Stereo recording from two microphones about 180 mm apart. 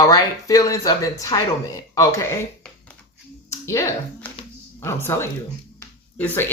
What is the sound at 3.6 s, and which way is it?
Speech, 15° left (ahead or behind).